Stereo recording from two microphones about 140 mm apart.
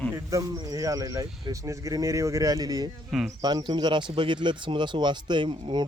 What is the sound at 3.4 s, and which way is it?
Speech, 30° right (ahead or behind).